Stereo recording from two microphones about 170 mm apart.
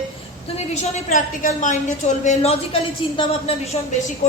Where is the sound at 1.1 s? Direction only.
50° left (ahead or behind).